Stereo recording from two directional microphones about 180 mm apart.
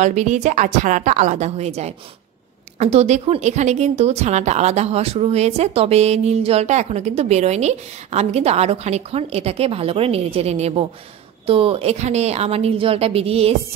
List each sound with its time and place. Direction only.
0.0 s a woman's voice: 40° right (ahead or behind)